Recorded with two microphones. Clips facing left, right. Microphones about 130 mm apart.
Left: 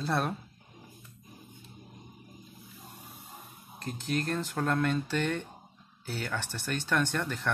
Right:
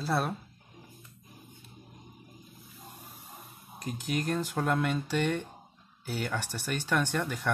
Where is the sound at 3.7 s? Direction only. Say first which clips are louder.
Even; 10° right (ahead or behind).